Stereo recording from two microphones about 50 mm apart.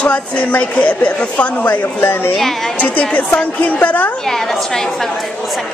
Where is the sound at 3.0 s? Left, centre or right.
Left.